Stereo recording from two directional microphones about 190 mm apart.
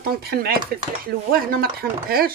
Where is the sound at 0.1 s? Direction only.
55° right (ahead or behind).